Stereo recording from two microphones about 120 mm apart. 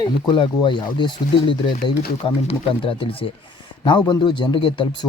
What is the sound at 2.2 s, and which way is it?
Speech, 55° left (ahead or behind).